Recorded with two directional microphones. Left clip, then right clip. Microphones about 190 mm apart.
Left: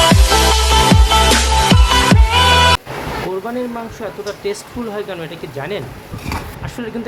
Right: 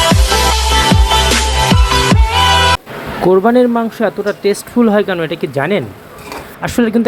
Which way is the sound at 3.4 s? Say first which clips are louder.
Right 12 dB; 35° right (ahead or behind).